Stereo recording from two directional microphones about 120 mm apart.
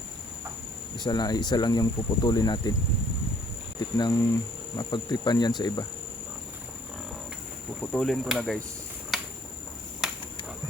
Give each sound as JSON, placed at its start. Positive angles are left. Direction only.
{"t": 0.9, "sound": "speech", "side_deg": 35}
{"t": 3.9, "sound": "speech", "side_deg": 35}
{"t": 7.8, "sound": "speech", "side_deg": 5}
{"t": 9.1, "sound": "cricket", "side_deg": -5}
{"t": 10.0, "sound": "a sound", "side_deg": 0}